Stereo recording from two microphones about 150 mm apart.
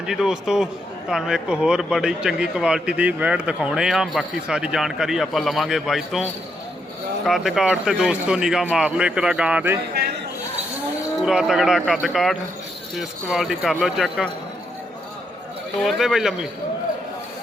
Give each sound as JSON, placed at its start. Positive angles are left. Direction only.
{"t": 0.0, "sound": "a man's voice", "side_deg": -5}
{"t": 7.3, "sound": "a man's voice", "side_deg": 0}
{"t": 10.0, "sound": "speech", "side_deg": -90}
{"t": 11.2, "sound": "a man's voice", "side_deg": -5}
{"t": 15.8, "sound": "a man's voice", "side_deg": 0}